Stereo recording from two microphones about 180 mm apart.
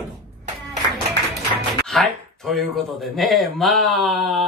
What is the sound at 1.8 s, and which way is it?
Speech, centre (ahead or behind).